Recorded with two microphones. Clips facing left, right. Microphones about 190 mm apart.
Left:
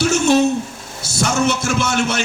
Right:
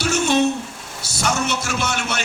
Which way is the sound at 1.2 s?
50° left (ahead or behind).